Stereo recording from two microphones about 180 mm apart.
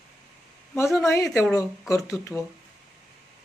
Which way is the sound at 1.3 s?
Centre (ahead or behind).